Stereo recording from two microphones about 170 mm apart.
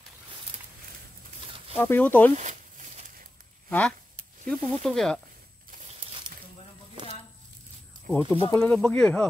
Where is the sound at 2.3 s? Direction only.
45° right (ahead or behind).